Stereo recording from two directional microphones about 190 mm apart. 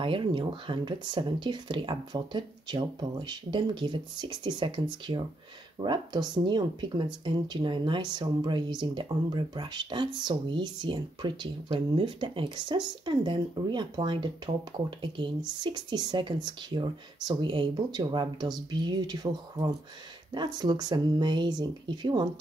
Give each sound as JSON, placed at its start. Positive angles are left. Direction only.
{"t": 0.0, "sound": "speech", "side_deg": -25}